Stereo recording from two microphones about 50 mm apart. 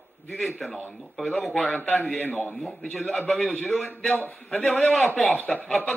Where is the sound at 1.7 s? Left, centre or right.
Left.